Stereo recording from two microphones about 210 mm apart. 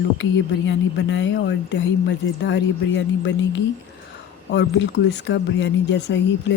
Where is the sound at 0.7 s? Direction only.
60° left (ahead or behind).